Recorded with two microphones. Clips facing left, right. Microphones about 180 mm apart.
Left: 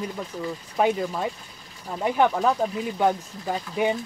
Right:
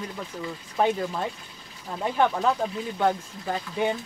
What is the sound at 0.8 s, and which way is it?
Speech, 10° left (ahead or behind).